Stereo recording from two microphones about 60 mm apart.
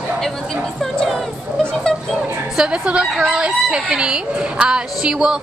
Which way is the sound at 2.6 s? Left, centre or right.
Centre.